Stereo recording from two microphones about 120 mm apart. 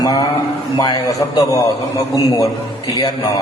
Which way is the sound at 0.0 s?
35° left (ahead or behind).